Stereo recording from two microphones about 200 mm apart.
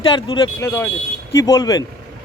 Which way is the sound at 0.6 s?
10° left (ahead or behind).